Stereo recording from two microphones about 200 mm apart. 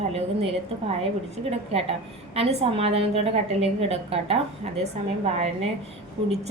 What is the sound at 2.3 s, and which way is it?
A woman's voice, 30° right (ahead or behind).